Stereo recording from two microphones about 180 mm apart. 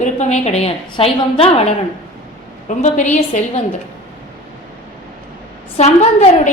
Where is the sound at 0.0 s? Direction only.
40° left (ahead or behind).